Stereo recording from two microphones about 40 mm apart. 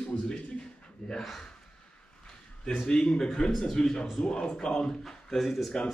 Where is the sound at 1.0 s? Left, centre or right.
Centre.